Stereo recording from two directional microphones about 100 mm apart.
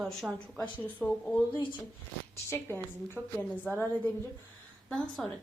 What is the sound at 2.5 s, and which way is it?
A woman's voice, 20° left (ahead or behind).